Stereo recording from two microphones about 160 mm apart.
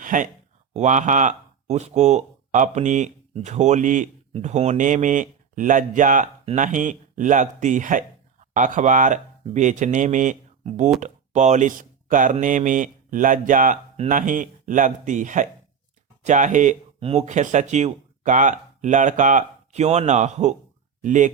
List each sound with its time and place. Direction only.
0.0 s speech: 55° right (ahead or behind)
6.4 s speech: 40° right (ahead or behind)
6.7 s speech: 55° right (ahead or behind)
17.0 s speech: 40° right (ahead or behind)